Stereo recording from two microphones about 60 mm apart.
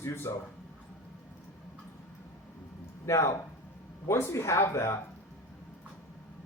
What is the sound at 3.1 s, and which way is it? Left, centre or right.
Speech, left.